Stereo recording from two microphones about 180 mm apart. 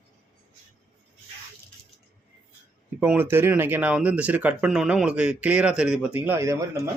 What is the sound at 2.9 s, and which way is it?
Speech, 10° right (ahead or behind).